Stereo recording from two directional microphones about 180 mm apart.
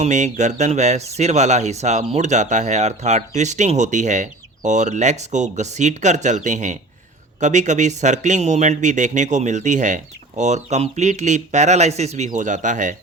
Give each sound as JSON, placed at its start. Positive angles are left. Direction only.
{"t": 0.0, "sound": "speech", "side_deg": -40}